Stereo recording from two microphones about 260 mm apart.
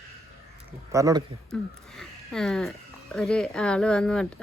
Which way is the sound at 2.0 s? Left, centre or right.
Centre.